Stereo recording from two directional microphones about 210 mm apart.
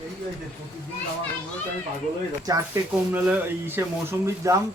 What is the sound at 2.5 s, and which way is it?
Speech, 15° right (ahead or behind).